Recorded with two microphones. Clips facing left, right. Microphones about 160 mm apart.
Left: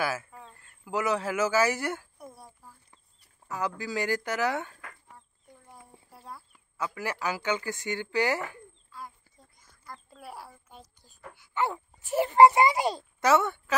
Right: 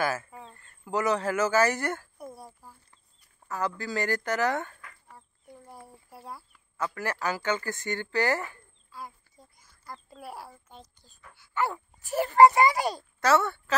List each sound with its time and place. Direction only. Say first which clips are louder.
0.0 s speech: right 2 dB; 5° left (ahead or behind)
2.1 s a sound: right 4 dB; 5° right (ahead or behind)
3.4 s speech: right 1 dB; 10° left (ahead or behind)
5.1 s a sound: right 1 dB; 5° right (ahead or behind)
6.1 s chicken: right 2 dB; 5° right (ahead or behind)
6.8 s speech: right 1 dB; 10° left (ahead or behind)
9.6 s a child's voice: right 2 dB; centre (ahead or behind); by 13.7 s 15° left (ahead or behind)